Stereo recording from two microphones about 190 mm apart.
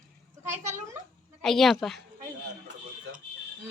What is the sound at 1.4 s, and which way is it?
Speech, centre (ahead or behind).